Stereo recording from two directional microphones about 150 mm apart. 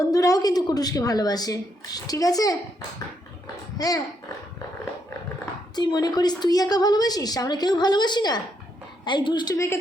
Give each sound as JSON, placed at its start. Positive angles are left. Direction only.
{"t": 0.1, "sound": "a woman's voice", "side_deg": 25}
{"t": 3.8, "sound": "a woman's voice", "side_deg": 25}
{"t": 5.7, "sound": "a woman's voice", "side_deg": 30}